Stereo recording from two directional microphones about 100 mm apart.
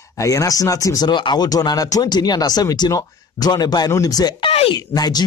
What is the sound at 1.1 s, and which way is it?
Speech, 50° left (ahead or behind).